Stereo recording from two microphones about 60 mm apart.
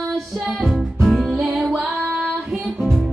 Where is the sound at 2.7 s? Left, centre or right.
Centre.